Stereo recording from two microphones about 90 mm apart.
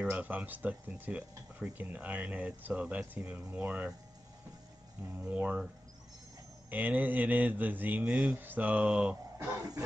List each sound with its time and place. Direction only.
0.0 s speech: 20° right (ahead or behind)
5.1 s speech: 15° right (ahead or behind)
6.7 s speech: 20° right (ahead or behind)